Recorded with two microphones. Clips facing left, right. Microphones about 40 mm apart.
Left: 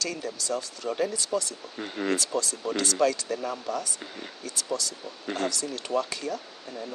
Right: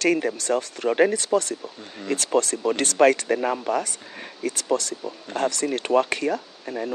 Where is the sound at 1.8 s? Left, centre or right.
Left.